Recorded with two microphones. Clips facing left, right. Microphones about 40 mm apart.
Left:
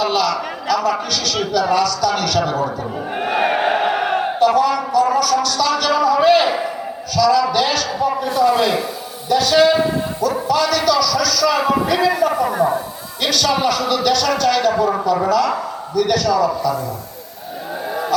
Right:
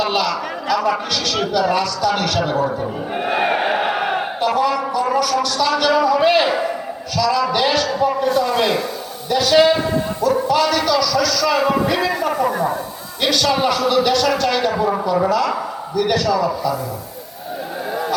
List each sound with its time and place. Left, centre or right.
0.0 s a man's voice: right
3.2 s battle cry: centre
4.5 s a sound: centre
5.4 s a man's voice: centre
8.2 s a man's voice: centre
10.5 s a man's voice: centre
13.3 s a man's voice: centre